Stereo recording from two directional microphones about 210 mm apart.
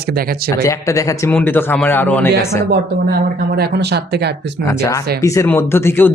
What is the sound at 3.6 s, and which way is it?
Speech, 50° right (ahead or behind).